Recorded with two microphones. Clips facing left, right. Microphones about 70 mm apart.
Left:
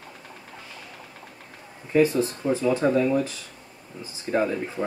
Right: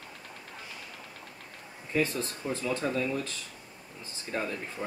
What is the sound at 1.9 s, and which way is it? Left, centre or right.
Speech, centre.